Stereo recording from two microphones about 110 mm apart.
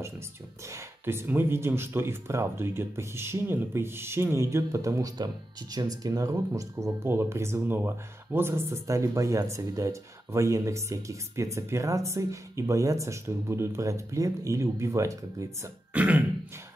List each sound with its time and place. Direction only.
0.7 s speech: 25° right (ahead or behind)
15.9 s throat clearing: 15° right (ahead or behind)